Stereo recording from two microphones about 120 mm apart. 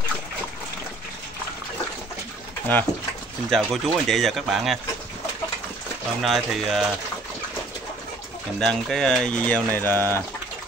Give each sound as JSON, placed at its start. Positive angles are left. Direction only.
{"t": 2.7, "sound": "speech", "side_deg": 15}
{"t": 3.4, "sound": "speech", "side_deg": 5}
{"t": 6.2, "sound": "speech", "side_deg": 0}
{"t": 8.5, "sound": "speech", "side_deg": 5}